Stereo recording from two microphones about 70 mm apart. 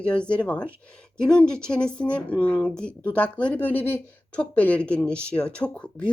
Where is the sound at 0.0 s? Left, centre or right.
Centre.